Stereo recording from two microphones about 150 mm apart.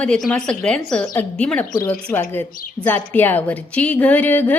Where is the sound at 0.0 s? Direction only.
5° left (ahead or behind).